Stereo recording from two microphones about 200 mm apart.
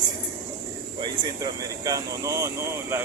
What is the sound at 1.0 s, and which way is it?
Speech, 20° right (ahead or behind).